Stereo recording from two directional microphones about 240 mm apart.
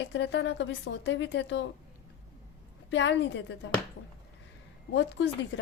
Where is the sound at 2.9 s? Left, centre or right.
Left.